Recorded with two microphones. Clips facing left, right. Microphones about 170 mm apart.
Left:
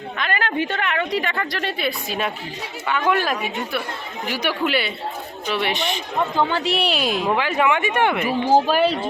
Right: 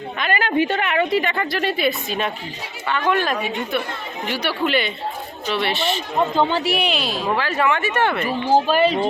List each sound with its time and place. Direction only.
0.2 s a woman's voice: 5° right (ahead or behind); by 6.0 s 15° left (ahead or behind)
6.1 s speech: 20° right (ahead or behind)
6.9 s speech: 45° left (ahead or behind)
7.3 s speech: 15° left (ahead or behind)